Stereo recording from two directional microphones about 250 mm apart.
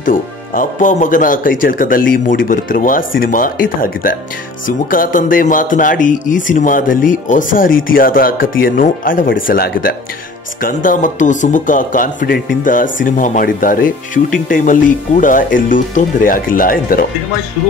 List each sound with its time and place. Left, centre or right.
0.0 s a man's voice: left